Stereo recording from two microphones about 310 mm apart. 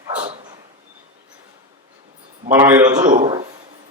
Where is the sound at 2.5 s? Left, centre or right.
Centre.